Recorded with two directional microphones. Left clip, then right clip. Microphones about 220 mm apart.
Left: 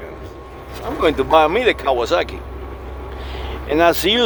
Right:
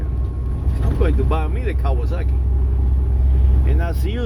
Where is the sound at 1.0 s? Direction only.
40° left (ahead or behind).